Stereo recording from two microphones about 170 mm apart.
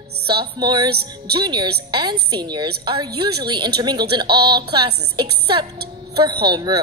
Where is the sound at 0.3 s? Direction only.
25° right (ahead or behind).